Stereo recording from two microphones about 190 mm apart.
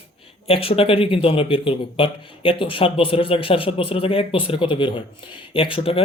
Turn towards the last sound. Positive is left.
turn(degrees=30)  # may be behind; listen again after turning